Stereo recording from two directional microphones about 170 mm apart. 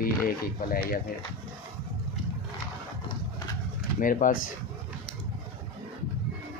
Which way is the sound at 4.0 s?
55° left (ahead or behind).